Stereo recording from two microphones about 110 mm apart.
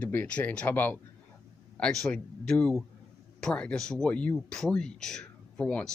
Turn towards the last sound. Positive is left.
turn(degrees=10)  # may be behind; listen again after turning